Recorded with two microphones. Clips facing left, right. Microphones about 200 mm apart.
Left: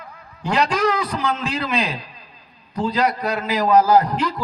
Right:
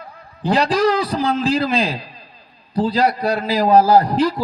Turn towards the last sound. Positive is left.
turn(degrees=-30)  # may be behind; listen again after turning